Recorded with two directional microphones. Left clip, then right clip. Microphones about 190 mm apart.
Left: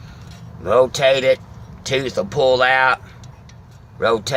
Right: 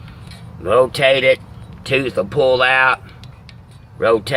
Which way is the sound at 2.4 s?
10° right (ahead or behind).